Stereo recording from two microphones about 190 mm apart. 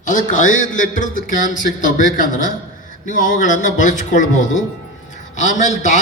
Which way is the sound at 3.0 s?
40° left (ahead or behind).